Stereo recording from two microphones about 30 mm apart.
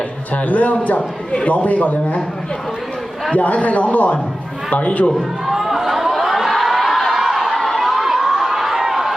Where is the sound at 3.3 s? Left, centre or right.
Left.